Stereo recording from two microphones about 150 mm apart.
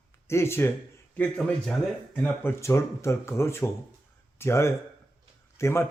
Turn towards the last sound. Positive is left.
turn(degrees=20)  # may be behind; listen again after turning